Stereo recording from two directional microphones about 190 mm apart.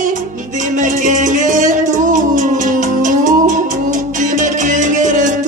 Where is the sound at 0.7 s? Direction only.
40° right (ahead or behind).